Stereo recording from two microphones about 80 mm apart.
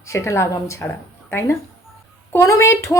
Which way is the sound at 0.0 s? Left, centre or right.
Left.